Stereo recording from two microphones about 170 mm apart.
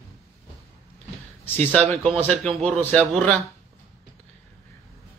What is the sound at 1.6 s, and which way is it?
Speech, 10° left (ahead or behind).